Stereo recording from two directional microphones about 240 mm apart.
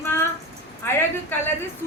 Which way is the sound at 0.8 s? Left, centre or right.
Centre.